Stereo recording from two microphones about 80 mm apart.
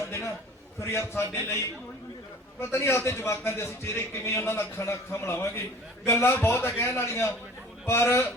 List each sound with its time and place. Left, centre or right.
0.8 s a man's voice: left
2.6 s a man's voice: left